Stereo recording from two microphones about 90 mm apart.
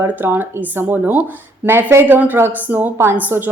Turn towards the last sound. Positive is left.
turn(degrees=-25)  # may be behind; listen again after turning